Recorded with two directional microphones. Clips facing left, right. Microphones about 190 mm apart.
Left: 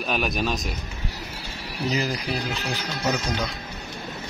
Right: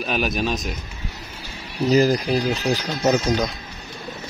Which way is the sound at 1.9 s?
40° right (ahead or behind).